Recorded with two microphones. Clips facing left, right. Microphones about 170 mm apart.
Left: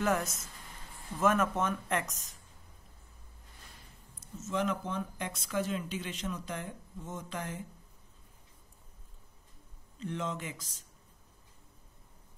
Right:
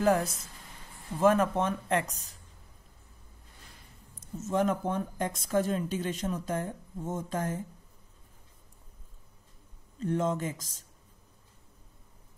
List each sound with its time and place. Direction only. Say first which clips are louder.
0.0 s speech: right 5 dB; 30° right (ahead or behind)
4.5 s speech: right 5 dB; 45° right (ahead or behind)
9.9 s speech: right 8 dB; 45° right (ahead or behind)